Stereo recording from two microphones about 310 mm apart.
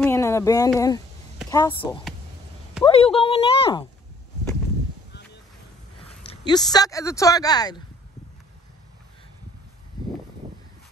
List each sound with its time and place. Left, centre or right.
0.0 s a sound: centre
0.7 s speech: centre
6.4 s speech: centre